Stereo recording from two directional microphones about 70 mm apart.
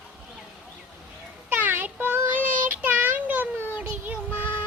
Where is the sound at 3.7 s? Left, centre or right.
Right.